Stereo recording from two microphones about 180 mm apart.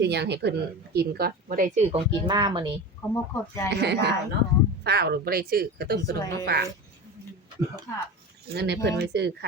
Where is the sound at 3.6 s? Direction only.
70° right (ahead or behind).